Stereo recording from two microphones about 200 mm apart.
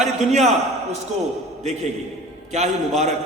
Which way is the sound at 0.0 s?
35° right (ahead or behind).